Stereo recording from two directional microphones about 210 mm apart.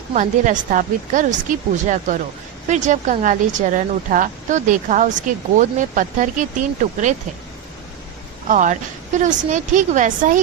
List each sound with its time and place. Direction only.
0.1 s speech: 35° right (ahead or behind)
8.4 s speech: 35° right (ahead or behind)